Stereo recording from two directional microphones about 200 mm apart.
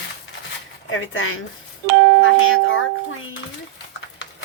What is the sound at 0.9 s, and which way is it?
Speech, 85° left.